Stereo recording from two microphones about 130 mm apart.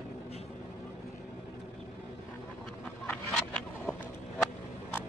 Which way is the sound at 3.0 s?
10° left (ahead or behind).